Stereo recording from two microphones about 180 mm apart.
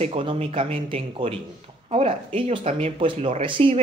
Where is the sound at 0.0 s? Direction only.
30° right (ahead or behind).